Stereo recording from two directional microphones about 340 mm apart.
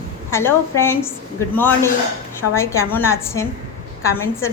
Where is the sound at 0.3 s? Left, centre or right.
Centre.